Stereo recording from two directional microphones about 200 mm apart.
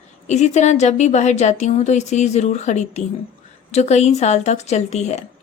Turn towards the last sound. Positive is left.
turn(degrees=35)  # may be behind; listen again after turning